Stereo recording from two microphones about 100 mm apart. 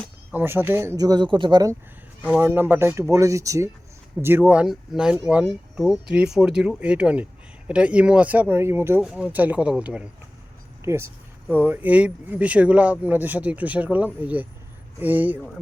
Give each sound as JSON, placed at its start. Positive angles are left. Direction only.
{"t": 0.3, "sound": "speech", "side_deg": -20}
{"t": 0.9, "sound": "speech", "side_deg": -40}
{"t": 2.4, "sound": "speech", "side_deg": -20}
{"t": 4.2, "sound": "speech", "side_deg": -20}
{"t": 5.8, "sound": "speech", "side_deg": 0}
{"t": 9.0, "sound": "speech", "side_deg": -10}
{"t": 10.8, "sound": "speech", "side_deg": -25}